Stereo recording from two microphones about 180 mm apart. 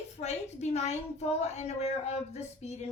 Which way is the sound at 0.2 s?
40° left (ahead or behind).